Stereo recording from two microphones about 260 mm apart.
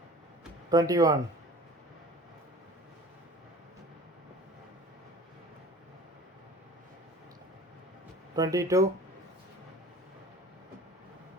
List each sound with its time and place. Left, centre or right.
0.7 s speech: centre
8.4 s speech: centre